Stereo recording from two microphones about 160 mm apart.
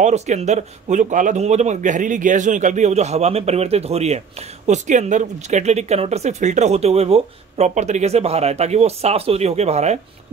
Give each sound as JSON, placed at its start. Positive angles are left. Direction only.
{"t": 0.0, "sound": "speech", "side_deg": -45}